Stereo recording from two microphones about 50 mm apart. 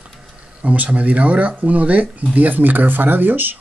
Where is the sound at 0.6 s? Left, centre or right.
Right.